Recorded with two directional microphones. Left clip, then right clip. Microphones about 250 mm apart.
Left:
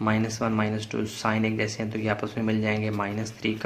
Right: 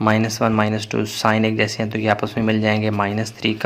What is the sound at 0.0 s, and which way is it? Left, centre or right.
Speech, right.